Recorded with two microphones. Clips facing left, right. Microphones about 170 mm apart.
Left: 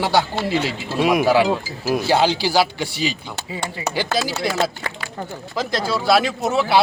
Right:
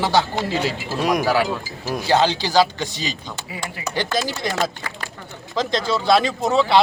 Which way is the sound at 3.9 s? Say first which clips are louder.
Even; 10° left (ahead or behind).